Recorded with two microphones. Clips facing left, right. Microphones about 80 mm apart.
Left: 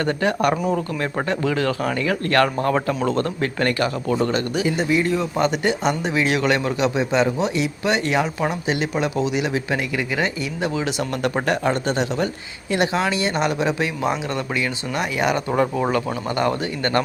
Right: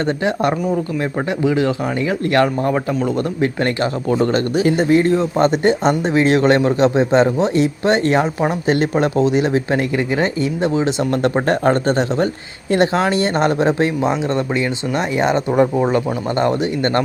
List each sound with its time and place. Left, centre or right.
1.5 s speech: centre; by 4.6 s right
4.6 s speech: right
14.0 s speech: right